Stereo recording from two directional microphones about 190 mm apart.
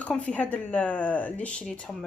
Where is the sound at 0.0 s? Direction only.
5° left (ahead or behind).